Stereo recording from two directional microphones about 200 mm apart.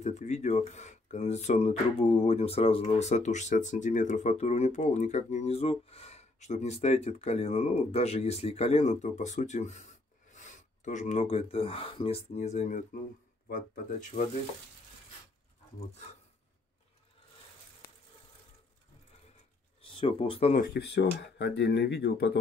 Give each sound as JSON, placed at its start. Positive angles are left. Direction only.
{"t": 0.0, "sound": "speech", "side_deg": 35}
{"t": 19.8, "sound": "speech", "side_deg": 25}